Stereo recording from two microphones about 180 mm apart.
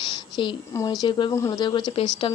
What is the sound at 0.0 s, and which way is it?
Speech, 25° left (ahead or behind).